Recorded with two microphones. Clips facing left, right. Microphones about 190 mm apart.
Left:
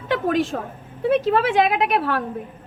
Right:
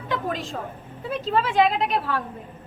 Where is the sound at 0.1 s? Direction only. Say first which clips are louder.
Left 8 dB; 65° left (ahead or behind).